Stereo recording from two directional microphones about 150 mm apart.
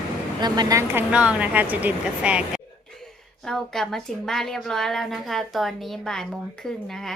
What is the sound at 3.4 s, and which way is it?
A woman's voice, 5° left (ahead or behind).